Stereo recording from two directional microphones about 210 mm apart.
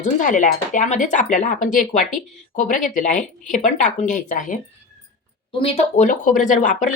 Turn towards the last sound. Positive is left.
turn(degrees=35)  # may be behind; listen again after turning